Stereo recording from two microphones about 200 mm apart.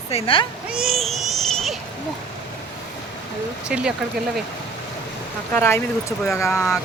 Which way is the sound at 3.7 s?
5° right (ahead or behind).